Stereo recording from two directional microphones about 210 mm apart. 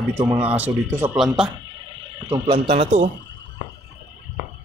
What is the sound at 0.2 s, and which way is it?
Speech, 5° right (ahead or behind).